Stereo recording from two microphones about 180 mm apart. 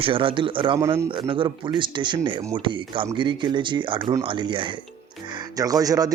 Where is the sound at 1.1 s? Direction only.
25° right (ahead or behind).